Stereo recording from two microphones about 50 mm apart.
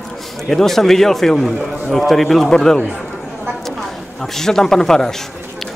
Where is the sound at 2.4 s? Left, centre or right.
Centre.